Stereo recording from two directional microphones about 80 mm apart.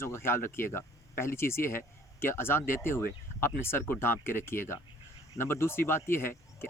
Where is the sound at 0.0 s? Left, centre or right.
Left.